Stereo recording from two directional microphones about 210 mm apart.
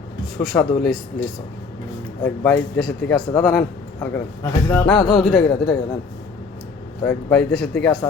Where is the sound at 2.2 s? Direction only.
5° left (ahead or behind).